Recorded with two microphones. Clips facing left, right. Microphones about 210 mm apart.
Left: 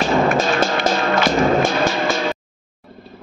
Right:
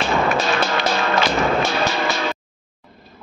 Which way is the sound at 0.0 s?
40° left (ahead or behind).